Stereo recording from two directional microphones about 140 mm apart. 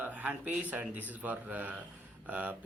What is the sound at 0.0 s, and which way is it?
Speech, 10° right (ahead or behind).